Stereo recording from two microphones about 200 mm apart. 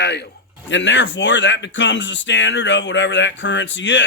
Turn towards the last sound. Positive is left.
turn(degrees=65)  # may be behind; listen again after turning